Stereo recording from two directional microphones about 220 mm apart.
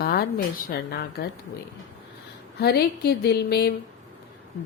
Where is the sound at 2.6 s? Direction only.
45° left (ahead or behind).